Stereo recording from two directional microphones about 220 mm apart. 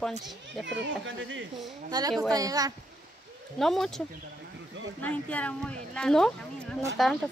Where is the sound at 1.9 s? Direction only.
15° right (ahead or behind).